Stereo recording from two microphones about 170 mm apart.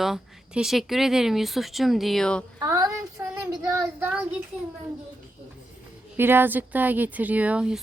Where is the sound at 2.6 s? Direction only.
20° right (ahead or behind).